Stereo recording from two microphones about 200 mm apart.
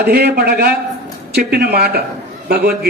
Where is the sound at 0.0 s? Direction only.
55° right (ahead or behind).